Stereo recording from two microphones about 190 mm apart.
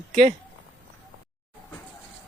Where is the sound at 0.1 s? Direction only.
35° right (ahead or behind).